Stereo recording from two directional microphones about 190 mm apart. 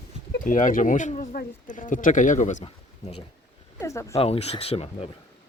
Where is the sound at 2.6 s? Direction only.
35° left (ahead or behind).